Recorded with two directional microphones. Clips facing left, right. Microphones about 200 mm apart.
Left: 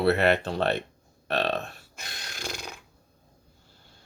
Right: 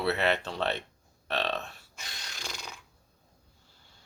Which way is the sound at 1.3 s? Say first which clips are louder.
Left 5 dB; 50° left (ahead or behind).